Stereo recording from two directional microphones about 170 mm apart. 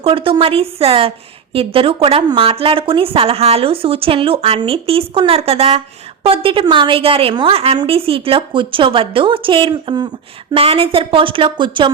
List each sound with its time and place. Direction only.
0.0 s a woman's voice: 30° right (ahead or behind)